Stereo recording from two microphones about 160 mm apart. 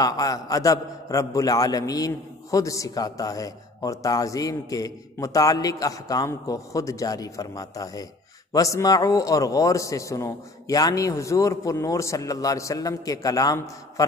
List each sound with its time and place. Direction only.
0.0 s a man's voice: 25° left (ahead or behind)